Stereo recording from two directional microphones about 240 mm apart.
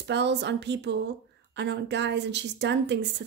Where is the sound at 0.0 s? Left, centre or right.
Right.